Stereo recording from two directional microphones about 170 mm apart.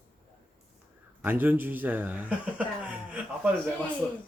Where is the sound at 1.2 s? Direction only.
10° right (ahead or behind).